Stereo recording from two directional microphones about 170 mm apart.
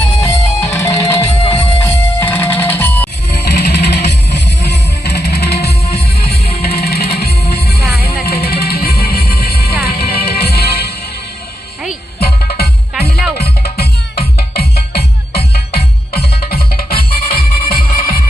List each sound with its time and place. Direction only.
0.2 s music: 15° left (ahead or behind)
1.3 s music: 35° left (ahead or behind)
2.1 s music: 10° left (ahead or behind)
3.2 s music: 70° left (ahead or behind)
12.2 s music: 65° left (ahead or behind)